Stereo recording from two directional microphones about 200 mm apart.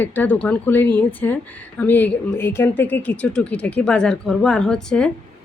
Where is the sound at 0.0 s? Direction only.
10° left (ahead or behind).